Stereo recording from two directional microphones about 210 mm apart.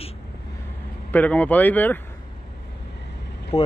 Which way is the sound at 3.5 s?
25° left (ahead or behind).